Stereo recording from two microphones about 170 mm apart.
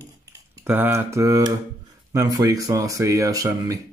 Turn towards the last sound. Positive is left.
turn(degrees=-20)  # may be behind; listen again after turning